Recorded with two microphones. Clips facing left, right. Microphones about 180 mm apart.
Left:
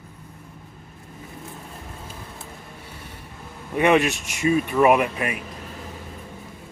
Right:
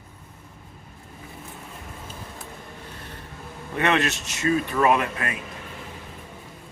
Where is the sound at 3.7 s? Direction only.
10° left (ahead or behind).